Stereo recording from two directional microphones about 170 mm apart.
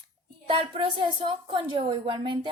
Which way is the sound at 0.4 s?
30° right (ahead or behind).